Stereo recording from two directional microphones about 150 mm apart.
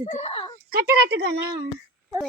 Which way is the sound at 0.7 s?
90° right.